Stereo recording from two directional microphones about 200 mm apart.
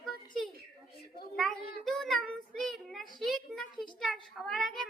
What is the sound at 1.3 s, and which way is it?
Child singing, centre (ahead or behind).